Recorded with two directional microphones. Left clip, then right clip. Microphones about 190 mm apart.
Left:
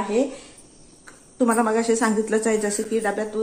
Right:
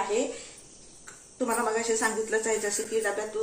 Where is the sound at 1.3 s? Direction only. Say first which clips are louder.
Left 7 dB; 60° left (ahead or behind).